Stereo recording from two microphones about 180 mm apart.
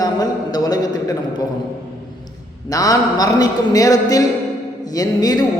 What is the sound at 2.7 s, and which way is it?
A man's voice, 20° left (ahead or behind).